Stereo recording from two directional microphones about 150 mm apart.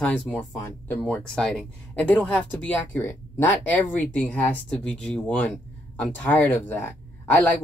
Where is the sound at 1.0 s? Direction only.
5° left (ahead or behind).